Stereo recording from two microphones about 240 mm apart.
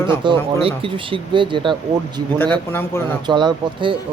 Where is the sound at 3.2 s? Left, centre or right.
Centre.